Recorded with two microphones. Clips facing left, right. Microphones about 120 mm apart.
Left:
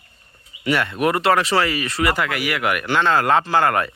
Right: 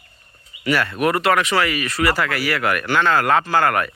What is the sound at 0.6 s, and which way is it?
Speech, 25° left (ahead or behind).